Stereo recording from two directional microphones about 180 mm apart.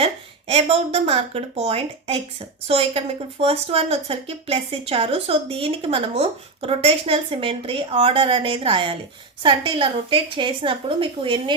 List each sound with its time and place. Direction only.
0.0 s a woman's voice: 35° right (ahead or behind)